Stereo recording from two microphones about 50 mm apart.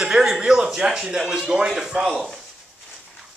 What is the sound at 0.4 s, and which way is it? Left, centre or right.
Speech, centre.